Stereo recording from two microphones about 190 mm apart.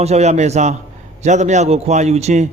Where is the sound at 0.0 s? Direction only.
35° right (ahead or behind).